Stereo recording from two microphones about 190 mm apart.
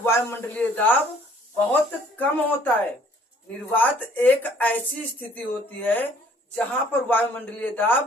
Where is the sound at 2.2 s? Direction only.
10° left (ahead or behind).